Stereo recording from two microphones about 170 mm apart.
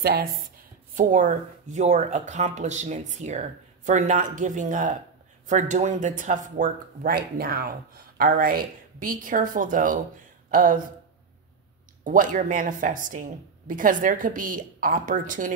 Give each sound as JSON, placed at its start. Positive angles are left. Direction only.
{"t": 0.0, "sound": "speech", "side_deg": -65}
{"t": 0.9, "sound": "speech", "side_deg": -50}
{"t": 12.0, "sound": "speech", "side_deg": -50}